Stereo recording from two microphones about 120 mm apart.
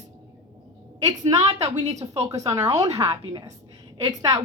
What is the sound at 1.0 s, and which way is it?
A woman's voice, 30° right (ahead or behind).